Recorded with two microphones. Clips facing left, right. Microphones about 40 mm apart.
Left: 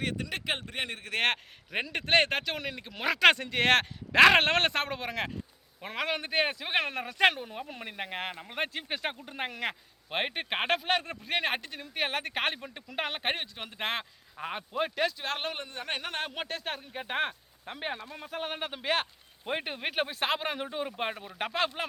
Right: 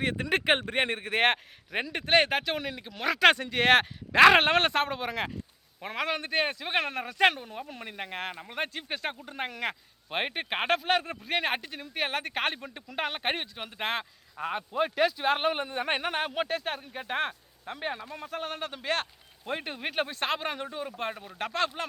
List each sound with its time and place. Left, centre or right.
0.0 s speech: right
0.3 s speech: right
1.1 s a man's voice: centre
1.7 s speech: centre
15.2 s speech: centre
20.7 s speech: centre